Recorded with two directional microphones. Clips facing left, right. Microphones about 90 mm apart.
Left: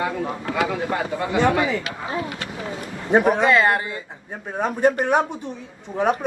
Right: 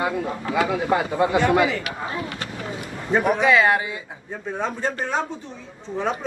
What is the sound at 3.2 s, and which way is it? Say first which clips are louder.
Speech: right 2 dB; 40° left (ahead or behind).